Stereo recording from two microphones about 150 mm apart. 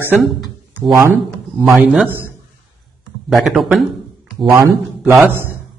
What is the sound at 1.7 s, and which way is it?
Speech, 10° right (ahead or behind).